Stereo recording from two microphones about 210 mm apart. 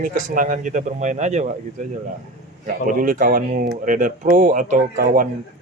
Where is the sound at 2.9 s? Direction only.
40° right (ahead or behind).